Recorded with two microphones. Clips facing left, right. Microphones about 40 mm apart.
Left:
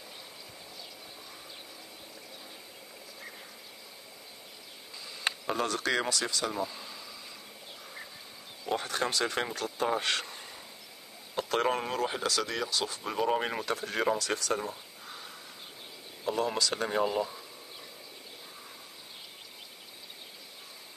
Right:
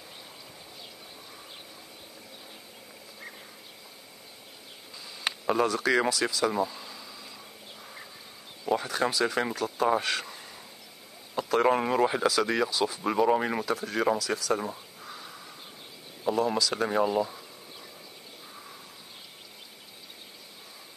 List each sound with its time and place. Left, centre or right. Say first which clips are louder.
5.5 s speech: right 6 dB; centre
6.6 s a sound: right 5 dB; centre
8.7 s speech: right 3 dB; centre
11.8 s speech: right 7 dB; right
12.1 s speech: right 6 dB; centre